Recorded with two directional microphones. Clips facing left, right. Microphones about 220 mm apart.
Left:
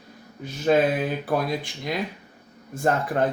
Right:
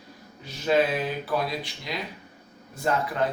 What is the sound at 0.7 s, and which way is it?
Speech, 50° left (ahead or behind).